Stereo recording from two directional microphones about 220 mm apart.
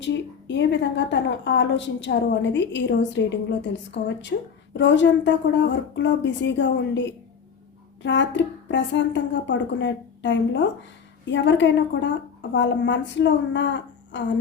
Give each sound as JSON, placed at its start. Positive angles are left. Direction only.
{"t": 0.0, "sound": "a woman's voice", "side_deg": 55}
{"t": 4.3, "sound": "a woman's voice", "side_deg": 50}